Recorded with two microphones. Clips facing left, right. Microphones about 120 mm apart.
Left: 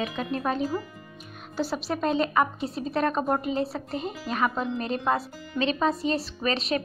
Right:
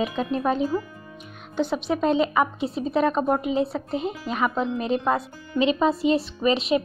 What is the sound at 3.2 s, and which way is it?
Speech, 15° right (ahead or behind).